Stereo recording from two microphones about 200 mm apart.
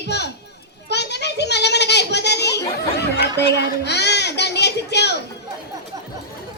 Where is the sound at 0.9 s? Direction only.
55° left (ahead or behind).